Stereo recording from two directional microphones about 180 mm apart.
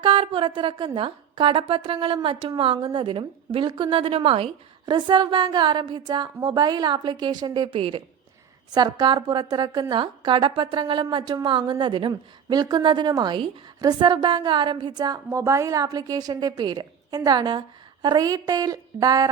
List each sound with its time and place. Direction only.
0.0 s a woman's voice: 30° right (ahead or behind)